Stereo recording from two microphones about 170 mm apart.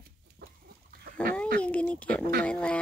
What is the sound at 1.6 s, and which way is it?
Speech, 5° left (ahead or behind).